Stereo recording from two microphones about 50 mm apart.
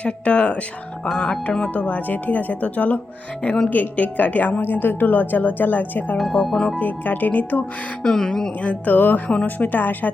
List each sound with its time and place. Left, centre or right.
0.0 s speech: left
6.5 s speech: centre
6.7 s speech: left
8.0 s speech: centre
8.6 s speech: left
9.3 s speech: left
9.6 s speech: left